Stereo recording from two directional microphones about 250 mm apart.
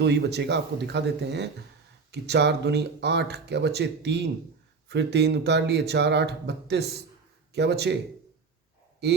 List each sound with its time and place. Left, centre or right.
0.0 s speech: right
9.0 s speech: right